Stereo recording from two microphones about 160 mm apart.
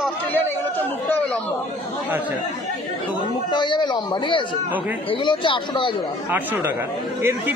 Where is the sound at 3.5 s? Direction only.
30° left (ahead or behind).